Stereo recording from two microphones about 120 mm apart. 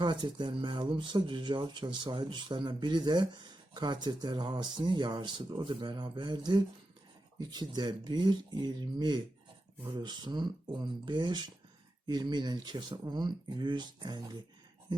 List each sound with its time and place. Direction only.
0.0 s speech: 40° right (ahead or behind)